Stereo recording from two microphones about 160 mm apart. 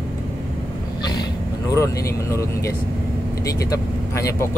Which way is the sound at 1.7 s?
20° left (ahead or behind).